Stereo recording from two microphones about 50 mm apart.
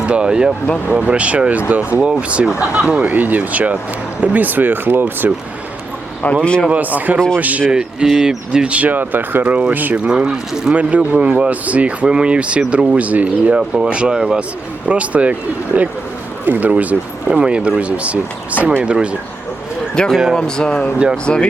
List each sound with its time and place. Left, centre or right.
0.1 s speech: centre
1.0 s speech: right
3.0 s speech: right
6.4 s speech: left
6.7 s speech: right
7.7 s speech: centre
8.7 s speech: right
9.4 s speech: right
10.8 s speech: right
13.6 s speech: centre
14.8 s speech: right
20.0 s speech: centre